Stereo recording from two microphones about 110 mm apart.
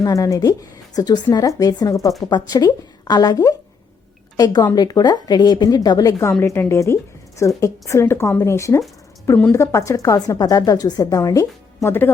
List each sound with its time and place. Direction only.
0.0 s a woman's voice: 30° left (ahead or behind)